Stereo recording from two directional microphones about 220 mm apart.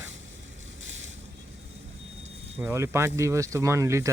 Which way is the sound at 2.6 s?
10° right (ahead or behind).